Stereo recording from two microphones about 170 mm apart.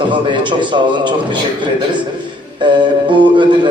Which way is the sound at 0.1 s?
30° right (ahead or behind).